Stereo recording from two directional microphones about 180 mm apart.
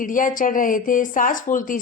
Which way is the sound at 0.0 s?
50° left (ahead or behind).